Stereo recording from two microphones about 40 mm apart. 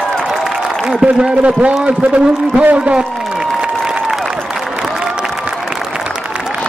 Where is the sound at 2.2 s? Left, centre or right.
Right.